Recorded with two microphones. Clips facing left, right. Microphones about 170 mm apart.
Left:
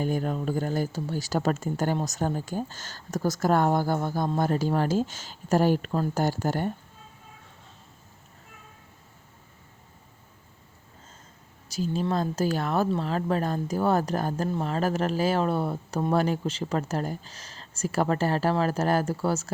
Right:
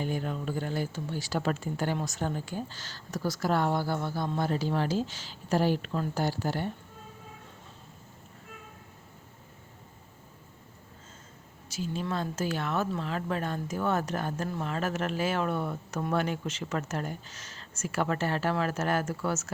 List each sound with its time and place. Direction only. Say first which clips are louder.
0.0 s speech: left 5 dB; 45° left (ahead or behind)
11.7 s speech: left 6 dB; 40° left (ahead or behind)